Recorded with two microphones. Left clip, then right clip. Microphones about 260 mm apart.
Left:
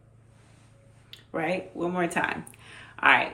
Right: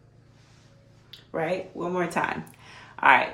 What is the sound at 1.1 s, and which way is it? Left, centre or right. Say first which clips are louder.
Speech: right 1 dB; centre.